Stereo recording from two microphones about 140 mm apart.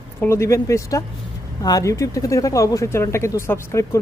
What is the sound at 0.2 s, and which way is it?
Speech, 20° left (ahead or behind).